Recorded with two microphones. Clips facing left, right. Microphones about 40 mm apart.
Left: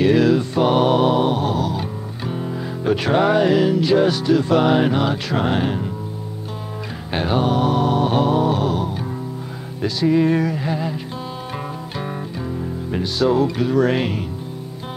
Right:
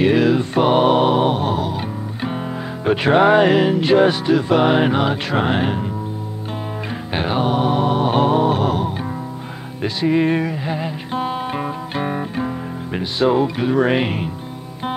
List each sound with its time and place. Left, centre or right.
0.0 s music: right
7.2 s music: right
10.0 s music: right